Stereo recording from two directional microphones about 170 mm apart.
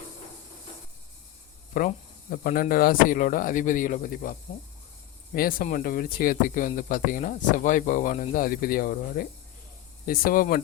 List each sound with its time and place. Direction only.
1.7 s speech: 55° left (ahead or behind)